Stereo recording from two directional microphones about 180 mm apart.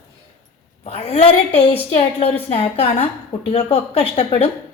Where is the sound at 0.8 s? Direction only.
35° left (ahead or behind).